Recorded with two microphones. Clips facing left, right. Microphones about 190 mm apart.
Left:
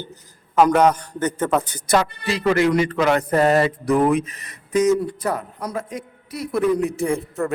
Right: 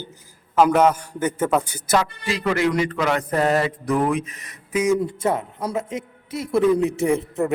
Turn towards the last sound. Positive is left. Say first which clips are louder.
# right 2 dB
turn(degrees=-20)  # may be behind; listen again after turning